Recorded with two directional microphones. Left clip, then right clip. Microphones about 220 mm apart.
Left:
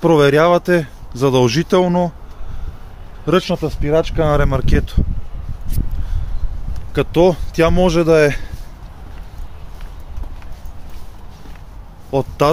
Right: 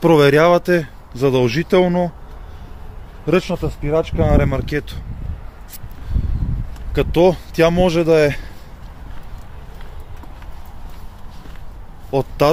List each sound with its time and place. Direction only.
0.0 s speech: 5° right (ahead or behind)
1.1 s speech: 15° left (ahead or behind)
3.3 s speech: 20° left (ahead or behind)
6.9 s speech: centre (ahead or behind)
12.1 s speech: 5° left (ahead or behind)